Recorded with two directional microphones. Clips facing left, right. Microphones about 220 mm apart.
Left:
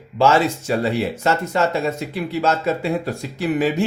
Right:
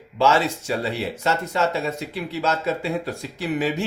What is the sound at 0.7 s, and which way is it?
Speech, 50° left (ahead or behind).